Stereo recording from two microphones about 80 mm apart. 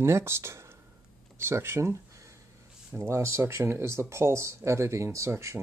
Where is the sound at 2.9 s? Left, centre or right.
Right.